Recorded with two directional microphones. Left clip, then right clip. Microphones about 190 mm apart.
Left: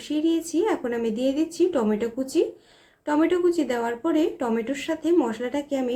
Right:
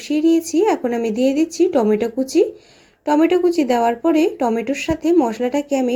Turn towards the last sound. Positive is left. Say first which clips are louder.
# right 8 dB
turn(degrees=-25)  # may be behind; listen again after turning